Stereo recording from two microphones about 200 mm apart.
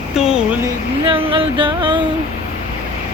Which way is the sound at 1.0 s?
25° right (ahead or behind).